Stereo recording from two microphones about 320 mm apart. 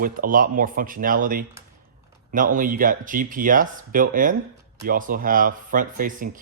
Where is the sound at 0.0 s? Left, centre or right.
Right.